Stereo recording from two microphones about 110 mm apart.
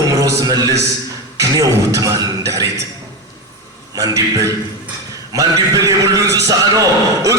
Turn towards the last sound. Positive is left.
turn(degrees=-30)  # may be behind; listen again after turning